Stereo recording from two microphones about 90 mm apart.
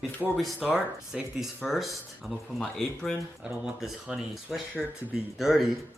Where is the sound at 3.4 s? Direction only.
10° right (ahead or behind).